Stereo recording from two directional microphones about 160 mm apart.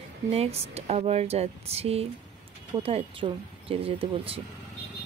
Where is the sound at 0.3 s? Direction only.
40° right (ahead or behind).